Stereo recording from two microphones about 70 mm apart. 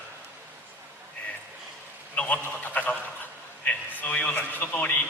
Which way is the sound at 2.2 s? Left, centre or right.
Centre.